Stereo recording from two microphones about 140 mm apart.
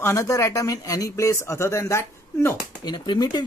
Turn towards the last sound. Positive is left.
turn(degrees=30)  # may be behind; listen again after turning